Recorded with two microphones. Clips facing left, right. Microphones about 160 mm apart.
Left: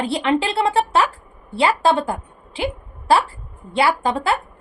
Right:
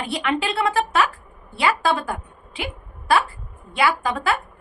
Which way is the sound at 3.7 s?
30° left (ahead or behind).